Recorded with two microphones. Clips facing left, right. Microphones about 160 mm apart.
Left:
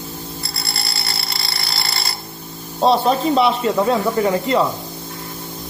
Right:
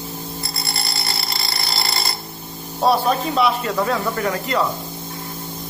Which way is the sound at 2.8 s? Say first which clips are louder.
Left 2 dB; 25° left (ahead or behind).